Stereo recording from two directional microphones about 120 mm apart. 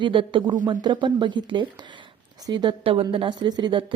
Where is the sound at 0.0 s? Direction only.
45° right (ahead or behind).